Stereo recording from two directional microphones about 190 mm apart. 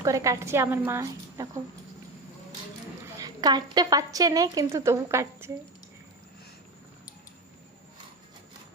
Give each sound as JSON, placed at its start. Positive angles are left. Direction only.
{"t": 0.0, "sound": "a woman's voice", "side_deg": -15}
{"t": 3.2, "sound": "a woman's voice", "side_deg": -20}